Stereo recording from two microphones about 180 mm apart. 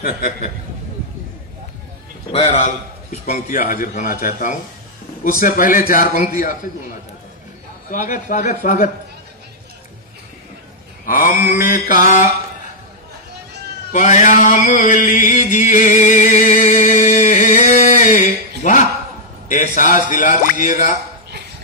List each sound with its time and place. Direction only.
0.0 s a man's voice: 55° left (ahead or behind)
2.3 s a man's voice: 40° left (ahead or behind)
3.5 s speech: 50° left (ahead or behind)
7.9 s speech: 45° left (ahead or behind)
11.1 s speech: 50° left (ahead or behind)
13.9 s mantra: 45° left (ahead or behind)
19.5 s speech: 45° left (ahead or behind)